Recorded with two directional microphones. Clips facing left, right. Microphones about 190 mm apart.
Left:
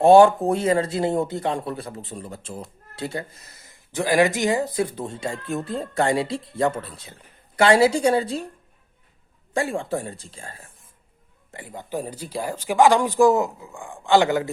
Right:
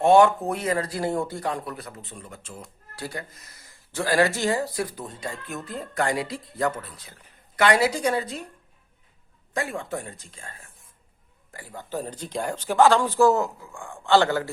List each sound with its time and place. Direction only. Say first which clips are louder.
0.0 s speech: left 4 dB; 30° left (ahead or behind)
9.5 s a woman's voice: left 5 dB; 30° left (ahead or behind)
11.5 s speech: left 2 dB; 20° left (ahead or behind)